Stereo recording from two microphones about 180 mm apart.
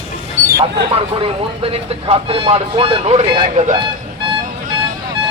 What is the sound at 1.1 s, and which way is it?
Speech, 30° right (ahead or behind).